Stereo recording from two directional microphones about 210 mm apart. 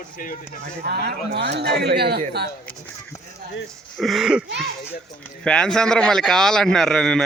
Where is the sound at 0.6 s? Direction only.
50° right (ahead or behind).